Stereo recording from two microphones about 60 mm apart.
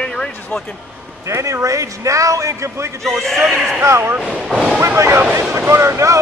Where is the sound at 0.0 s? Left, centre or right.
Centre.